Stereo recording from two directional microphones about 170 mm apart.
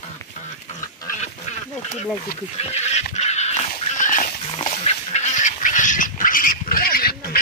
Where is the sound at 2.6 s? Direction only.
40° left (ahead or behind).